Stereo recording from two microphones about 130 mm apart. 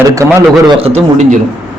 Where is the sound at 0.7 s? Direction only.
50° right (ahead or behind).